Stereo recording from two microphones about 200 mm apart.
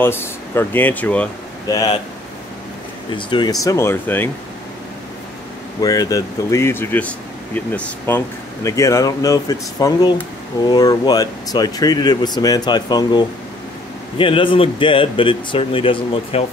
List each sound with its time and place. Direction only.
0.0 s speech: 10° left (ahead or behind)
1.7 s speech: 15° left (ahead or behind)
3.1 s speech: 25° left (ahead or behind)
5.8 s speech: 20° left (ahead or behind)